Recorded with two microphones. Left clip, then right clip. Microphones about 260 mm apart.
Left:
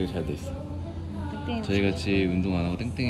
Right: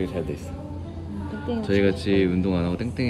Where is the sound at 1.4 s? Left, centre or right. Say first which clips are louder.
Right 5 dB; centre.